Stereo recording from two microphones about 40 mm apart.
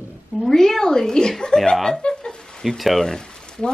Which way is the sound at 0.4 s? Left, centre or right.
Centre.